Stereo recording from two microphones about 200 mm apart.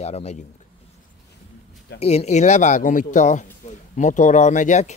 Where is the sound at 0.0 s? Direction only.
30° left (ahead or behind).